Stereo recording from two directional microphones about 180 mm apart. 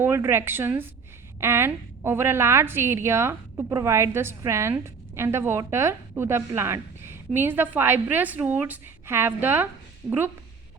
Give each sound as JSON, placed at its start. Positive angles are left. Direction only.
{"t": 0.0, "sound": "a woman's voice", "side_deg": -15}
{"t": 10.0, "sound": "speech", "side_deg": -25}